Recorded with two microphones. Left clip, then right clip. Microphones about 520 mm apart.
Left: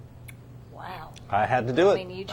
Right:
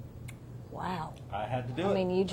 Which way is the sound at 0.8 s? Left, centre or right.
Right.